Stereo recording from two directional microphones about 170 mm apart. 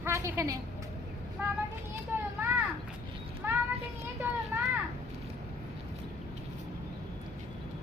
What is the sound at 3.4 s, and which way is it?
Child singing, 10° right (ahead or behind).